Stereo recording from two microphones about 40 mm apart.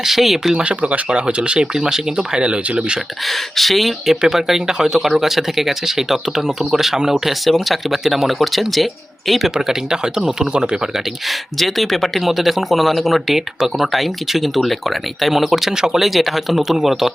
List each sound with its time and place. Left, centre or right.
0.0 s speech: centre
0.5 s speech: right
3.2 s speech: centre
7.4 s speech: centre
9.6 s speech: centre
11.3 s speech: centre
16.0 s speech: centre